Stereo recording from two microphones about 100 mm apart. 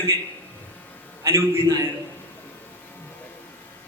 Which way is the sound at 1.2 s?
30° right (ahead or behind).